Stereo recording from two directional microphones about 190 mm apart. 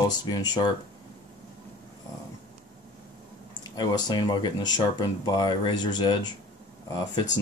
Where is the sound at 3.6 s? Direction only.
20° left (ahead or behind).